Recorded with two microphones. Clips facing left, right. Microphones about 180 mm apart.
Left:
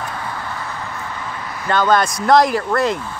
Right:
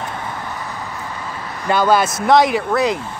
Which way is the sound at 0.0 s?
20° right (ahead or behind).